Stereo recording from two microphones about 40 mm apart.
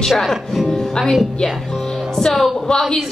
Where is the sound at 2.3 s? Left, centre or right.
Centre.